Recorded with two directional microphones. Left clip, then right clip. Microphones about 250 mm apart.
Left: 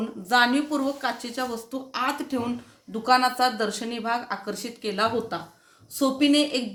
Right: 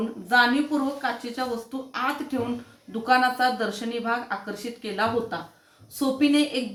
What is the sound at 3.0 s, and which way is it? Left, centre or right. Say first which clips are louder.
Speech: even; left.